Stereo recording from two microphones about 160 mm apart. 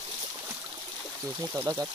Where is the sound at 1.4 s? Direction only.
20° right (ahead or behind).